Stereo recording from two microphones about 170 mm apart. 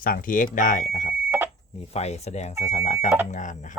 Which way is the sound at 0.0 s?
55° left (ahead or behind).